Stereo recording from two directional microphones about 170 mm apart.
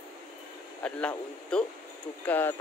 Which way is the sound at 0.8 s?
5° left (ahead or behind).